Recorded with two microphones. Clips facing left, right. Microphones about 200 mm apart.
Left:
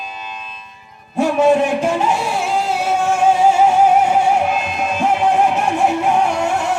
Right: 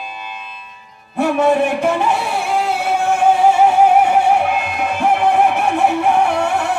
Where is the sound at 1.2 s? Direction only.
60° right (ahead or behind).